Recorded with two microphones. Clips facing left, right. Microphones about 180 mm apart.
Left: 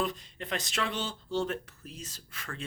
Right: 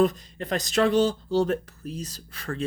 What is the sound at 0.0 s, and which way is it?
Speech, 40° right (ahead or behind).